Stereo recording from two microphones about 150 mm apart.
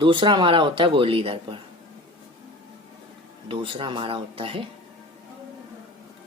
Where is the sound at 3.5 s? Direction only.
35° right (ahead or behind).